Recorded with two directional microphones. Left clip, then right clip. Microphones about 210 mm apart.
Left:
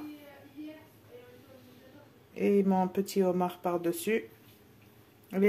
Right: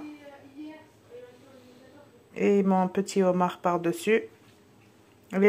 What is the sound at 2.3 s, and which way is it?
Speech, 10° right (ahead or behind).